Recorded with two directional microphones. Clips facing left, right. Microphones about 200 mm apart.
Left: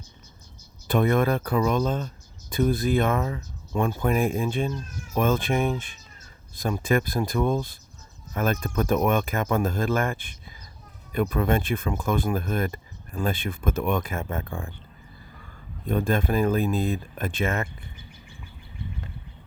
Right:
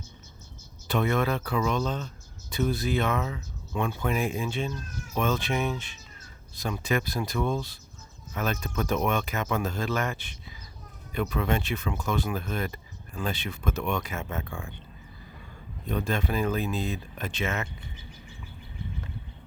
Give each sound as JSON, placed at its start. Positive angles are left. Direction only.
{"t": 0.9, "sound": "speech", "side_deg": 50}
{"t": 15.9, "sound": "speech", "side_deg": 50}